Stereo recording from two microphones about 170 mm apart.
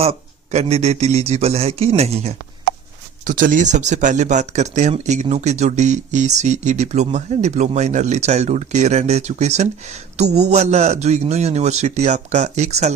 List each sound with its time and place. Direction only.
0.0 s a man's voice: 35° right (ahead or behind)
3.2 s speech: 50° right (ahead or behind)